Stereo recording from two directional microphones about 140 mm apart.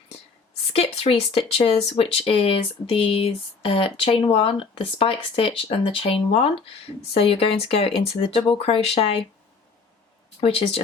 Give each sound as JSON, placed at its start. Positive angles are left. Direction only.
{"t": 0.7, "sound": "speech", "side_deg": 45}
{"t": 10.4, "sound": "speech", "side_deg": 40}